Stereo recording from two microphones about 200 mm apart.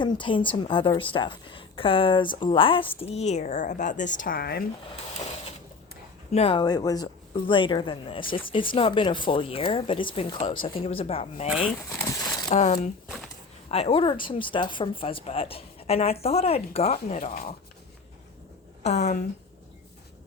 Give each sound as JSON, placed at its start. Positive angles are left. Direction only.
{"t": 0.0, "sound": "speech", "side_deg": 25}
{"t": 6.3, "sound": "speech", "side_deg": 30}
{"t": 11.9, "sound": "speech", "side_deg": 15}
{"t": 12.5, "sound": "speech", "side_deg": 35}
{"t": 18.8, "sound": "a woman's voice", "side_deg": 35}